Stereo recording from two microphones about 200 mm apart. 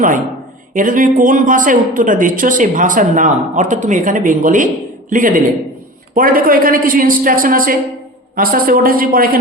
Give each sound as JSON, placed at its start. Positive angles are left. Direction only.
{"t": 0.7, "sound": "a woman's voice", "side_deg": -40}